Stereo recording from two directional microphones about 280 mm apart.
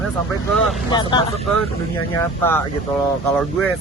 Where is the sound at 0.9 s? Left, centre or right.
Centre.